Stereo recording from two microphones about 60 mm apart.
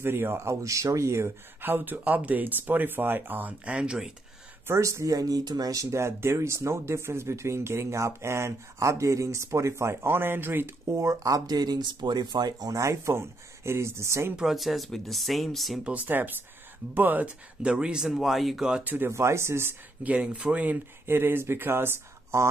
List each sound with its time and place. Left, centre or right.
0.0 s speech: right
1.6 s speech: right; by 4.1 s centre
4.7 s speech: right
10.0 s speech: right
10.9 s speech: right
14.4 s speech: centre
15.8 s speech: right; by 18.9 s centre
19.0 s speech: right
20.0 s speech: right
21.0 s speech: right